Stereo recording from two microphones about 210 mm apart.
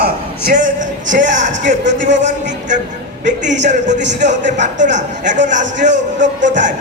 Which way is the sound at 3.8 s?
35° right (ahead or behind).